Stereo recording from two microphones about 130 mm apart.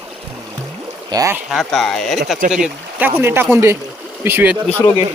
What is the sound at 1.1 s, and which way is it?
Speech, 25° right (ahead or behind).